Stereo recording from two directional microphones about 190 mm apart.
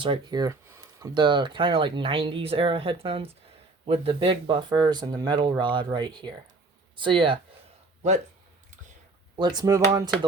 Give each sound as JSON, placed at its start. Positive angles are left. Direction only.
{"t": 0.0, "sound": "speech", "side_deg": -25}
{"t": 9.3, "sound": "speech", "side_deg": -20}